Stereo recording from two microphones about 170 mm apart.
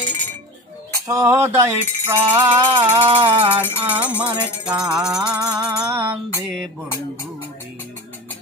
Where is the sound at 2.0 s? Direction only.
15° right (ahead or behind).